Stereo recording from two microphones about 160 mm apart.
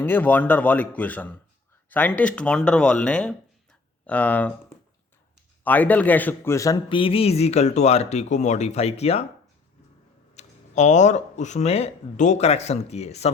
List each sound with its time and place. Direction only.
0.0 s speech: 10° left (ahead or behind)
5.6 s speech: 10° left (ahead or behind)
6.8 s speech: 35° left (ahead or behind)
10.3 s speech: 50° left (ahead or behind)